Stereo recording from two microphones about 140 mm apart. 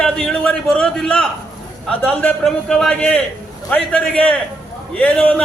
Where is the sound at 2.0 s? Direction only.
10° left (ahead or behind).